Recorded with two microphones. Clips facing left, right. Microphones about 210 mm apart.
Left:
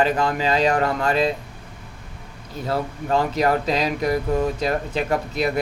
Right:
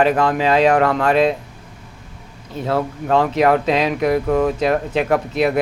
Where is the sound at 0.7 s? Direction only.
75° right (ahead or behind).